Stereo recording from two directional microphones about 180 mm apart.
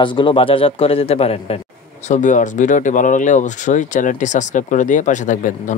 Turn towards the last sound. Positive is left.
turn(degrees=45)  # may be behind; listen again after turning